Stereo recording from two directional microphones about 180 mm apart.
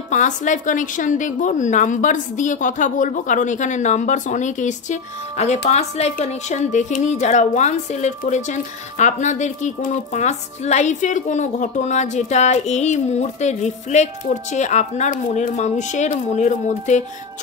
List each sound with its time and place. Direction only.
0.1 s a woman's voice: 45° left (ahead or behind)